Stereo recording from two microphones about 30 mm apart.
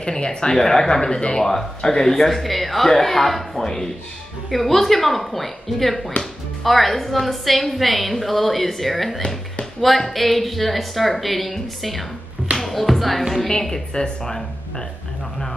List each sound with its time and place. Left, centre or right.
0.1 s speech: left
0.6 s speech: centre
2.2 s a woman's voice: centre
3.6 s speech: centre
4.5 s a woman's voice: centre
13.5 s speech: centre